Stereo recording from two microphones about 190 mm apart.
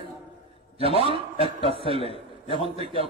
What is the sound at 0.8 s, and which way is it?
A man's voice, 30° right (ahead or behind).